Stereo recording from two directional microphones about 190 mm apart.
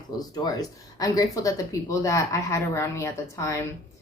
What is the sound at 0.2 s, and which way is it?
A woman's voice, 20° left (ahead or behind).